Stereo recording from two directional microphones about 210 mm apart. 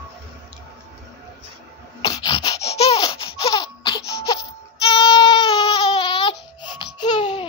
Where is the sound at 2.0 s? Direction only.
20° left (ahead or behind).